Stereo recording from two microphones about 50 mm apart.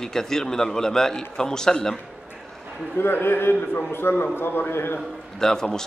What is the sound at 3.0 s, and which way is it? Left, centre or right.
A man's voice, left.